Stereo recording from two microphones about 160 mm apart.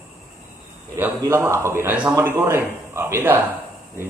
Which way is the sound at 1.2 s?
15° right (ahead or behind).